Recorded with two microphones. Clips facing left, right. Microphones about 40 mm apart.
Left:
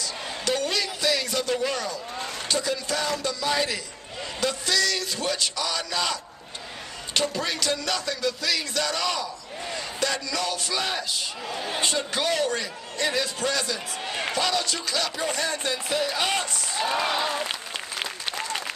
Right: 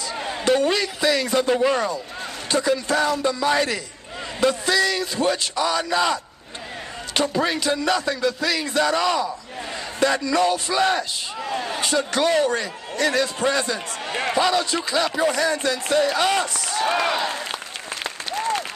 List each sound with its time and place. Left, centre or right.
0.2 s a sound: right
1.3 s music: right
7.2 s music: centre
12.2 s music: centre
15.2 s speech: centre
16.8 s speech: right